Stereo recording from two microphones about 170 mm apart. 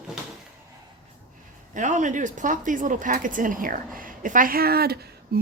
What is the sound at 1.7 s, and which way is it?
Speech, 45° right (ahead or behind).